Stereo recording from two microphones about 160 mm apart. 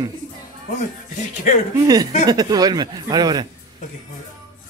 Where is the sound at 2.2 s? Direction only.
25° right (ahead or behind).